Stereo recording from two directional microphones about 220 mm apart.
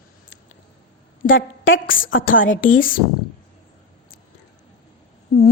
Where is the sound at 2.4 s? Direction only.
60° left (ahead or behind).